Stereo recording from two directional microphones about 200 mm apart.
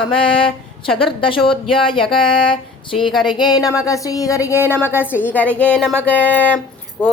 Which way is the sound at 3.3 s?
20° left (ahead or behind).